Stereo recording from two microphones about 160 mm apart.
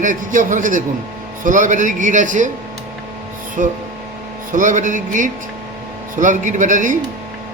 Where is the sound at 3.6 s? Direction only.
55° right (ahead or behind).